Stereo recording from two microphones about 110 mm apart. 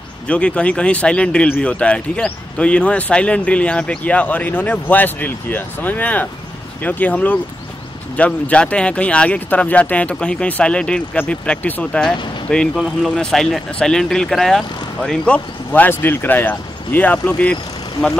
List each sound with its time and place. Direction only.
0.3 s a man's voice: 10° left (ahead or behind)
12.7 s speech: 5° right (ahead or behind)
13.1 s a man's voice: 5° left (ahead or behind)